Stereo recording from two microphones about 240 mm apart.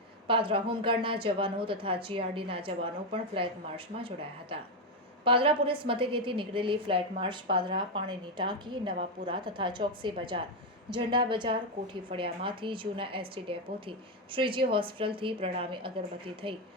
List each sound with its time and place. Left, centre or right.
0.3 s a woman's voice: right